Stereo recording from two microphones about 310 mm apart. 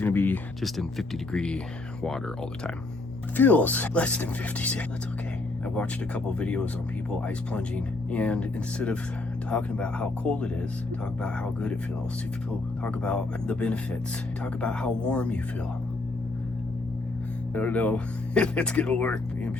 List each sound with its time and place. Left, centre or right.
0.0 s speech: centre
3.3 s speech: centre
12.8 s speech: centre
17.5 s speech: centre